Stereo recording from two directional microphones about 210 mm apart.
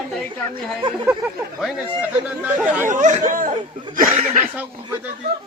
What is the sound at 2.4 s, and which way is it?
Chatter, 5° right (ahead or behind).